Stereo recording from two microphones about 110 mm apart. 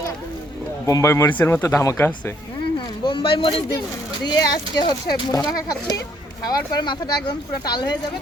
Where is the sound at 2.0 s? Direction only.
20° left (ahead or behind).